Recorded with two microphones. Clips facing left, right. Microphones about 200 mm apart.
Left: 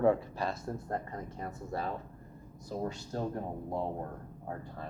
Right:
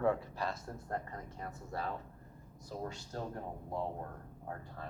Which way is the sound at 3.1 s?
15° left (ahead or behind).